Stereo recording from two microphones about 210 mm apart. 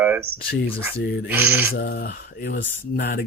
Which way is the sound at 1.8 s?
50° left (ahead or behind).